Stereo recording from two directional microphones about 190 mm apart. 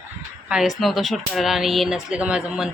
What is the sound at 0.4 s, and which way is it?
Speech, 5° right (ahead or behind).